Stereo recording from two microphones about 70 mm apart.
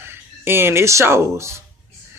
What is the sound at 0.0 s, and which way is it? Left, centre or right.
Speech, right.